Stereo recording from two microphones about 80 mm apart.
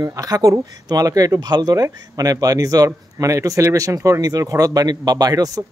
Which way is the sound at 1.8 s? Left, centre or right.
Right.